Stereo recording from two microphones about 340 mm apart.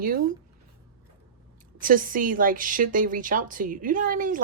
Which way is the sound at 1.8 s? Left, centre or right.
Right.